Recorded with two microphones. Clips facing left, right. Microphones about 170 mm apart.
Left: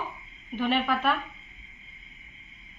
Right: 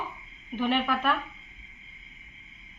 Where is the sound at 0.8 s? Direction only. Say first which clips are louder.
Left 1 dB; 10° left (ahead or behind).